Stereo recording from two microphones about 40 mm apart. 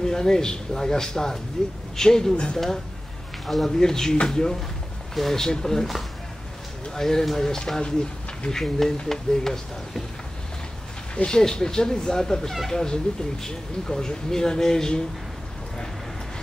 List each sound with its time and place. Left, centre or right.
0.0 s speech: centre
7.0 s speech: centre
11.2 s speech: centre